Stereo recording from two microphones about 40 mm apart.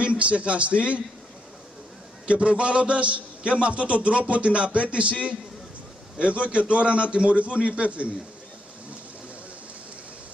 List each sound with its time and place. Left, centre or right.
0.0 s a man's voice: right
2.2 s a man's voice: right